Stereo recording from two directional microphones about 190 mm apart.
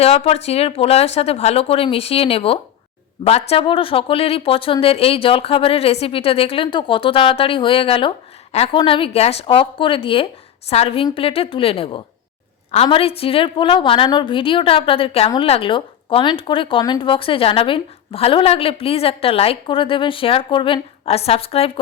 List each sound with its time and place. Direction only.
0.0 s speech: 30° left (ahead or behind)